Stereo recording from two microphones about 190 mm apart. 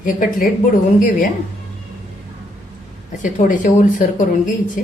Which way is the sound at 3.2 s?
40° left (ahead or behind).